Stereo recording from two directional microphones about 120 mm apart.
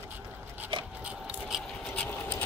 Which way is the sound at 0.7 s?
45° right (ahead or behind).